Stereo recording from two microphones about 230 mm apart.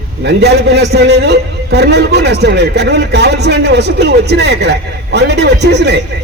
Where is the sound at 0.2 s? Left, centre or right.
Right.